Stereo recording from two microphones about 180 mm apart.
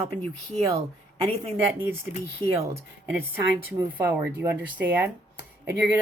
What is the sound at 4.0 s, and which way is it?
Speech, 10° right (ahead or behind).